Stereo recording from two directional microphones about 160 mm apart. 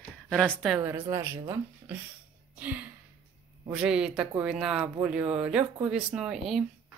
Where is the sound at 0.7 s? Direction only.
10° right (ahead or behind).